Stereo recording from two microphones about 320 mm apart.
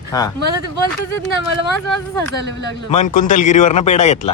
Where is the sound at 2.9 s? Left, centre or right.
Left.